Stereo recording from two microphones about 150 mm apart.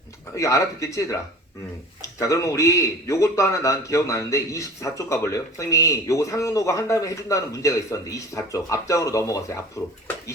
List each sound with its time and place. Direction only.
0.3 s a man's voice: 20° left (ahead or behind)